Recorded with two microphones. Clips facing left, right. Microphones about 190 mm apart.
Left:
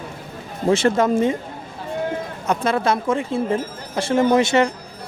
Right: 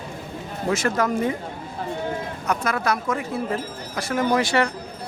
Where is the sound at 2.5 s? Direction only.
25° left (ahead or behind).